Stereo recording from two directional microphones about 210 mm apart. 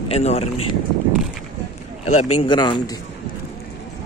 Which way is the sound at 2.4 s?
20° left (ahead or behind).